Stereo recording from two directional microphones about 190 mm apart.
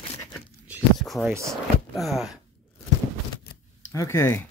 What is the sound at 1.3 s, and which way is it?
Speech, 15° right (ahead or behind).